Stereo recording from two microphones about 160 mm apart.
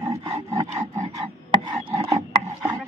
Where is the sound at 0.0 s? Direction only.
15° right (ahead or behind); by 2.0 s 30° right (ahead or behind).